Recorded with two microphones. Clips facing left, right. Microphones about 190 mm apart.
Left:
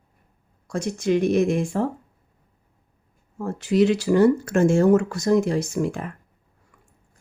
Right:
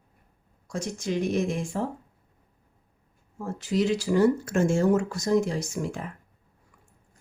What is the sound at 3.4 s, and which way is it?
A woman's voice, 65° left (ahead or behind).